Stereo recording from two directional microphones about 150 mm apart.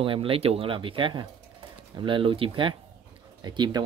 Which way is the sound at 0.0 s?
35° right (ahead or behind).